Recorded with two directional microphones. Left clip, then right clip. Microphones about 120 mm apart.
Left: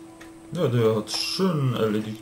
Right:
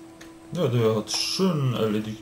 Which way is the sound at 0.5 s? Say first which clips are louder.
Left 1 dB; 10° right (ahead or behind).